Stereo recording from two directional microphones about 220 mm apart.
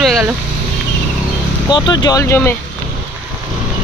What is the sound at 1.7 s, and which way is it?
Speech, 20° left (ahead or behind).